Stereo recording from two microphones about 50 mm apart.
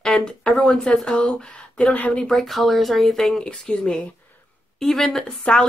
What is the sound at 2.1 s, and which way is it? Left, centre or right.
A woman's voice, centre.